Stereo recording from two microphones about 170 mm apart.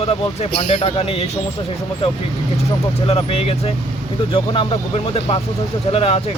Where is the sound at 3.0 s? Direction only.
35° left (ahead or behind).